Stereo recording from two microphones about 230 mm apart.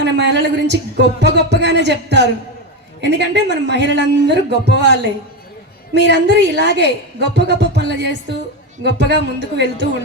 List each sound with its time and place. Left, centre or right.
0.0 s speech: right